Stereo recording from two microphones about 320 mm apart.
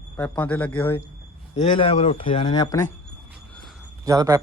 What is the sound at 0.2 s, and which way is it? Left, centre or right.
Speech, centre.